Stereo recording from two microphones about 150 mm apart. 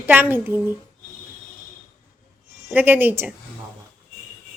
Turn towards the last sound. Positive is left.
turn(degrees=-15)  # may be behind; listen again after turning